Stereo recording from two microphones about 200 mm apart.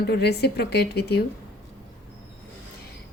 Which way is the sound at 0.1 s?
55° left (ahead or behind).